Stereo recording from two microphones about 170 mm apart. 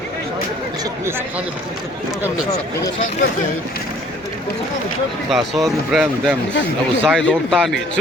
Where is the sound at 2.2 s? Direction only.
5° right (ahead or behind).